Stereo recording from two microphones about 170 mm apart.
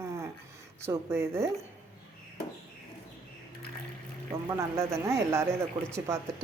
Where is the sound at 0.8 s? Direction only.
15° right (ahead or behind).